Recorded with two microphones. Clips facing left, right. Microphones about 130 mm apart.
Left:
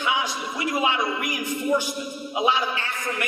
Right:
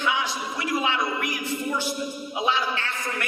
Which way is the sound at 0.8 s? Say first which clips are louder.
Left 2 dB; 15° left (ahead or behind).